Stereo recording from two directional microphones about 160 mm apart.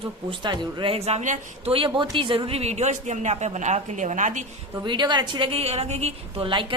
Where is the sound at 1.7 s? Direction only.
30° right (ahead or behind); by 4.4 s 50° right (ahead or behind).